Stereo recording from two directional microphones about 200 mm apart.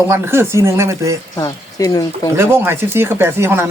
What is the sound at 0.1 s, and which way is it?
Speech, 10° right (ahead or behind).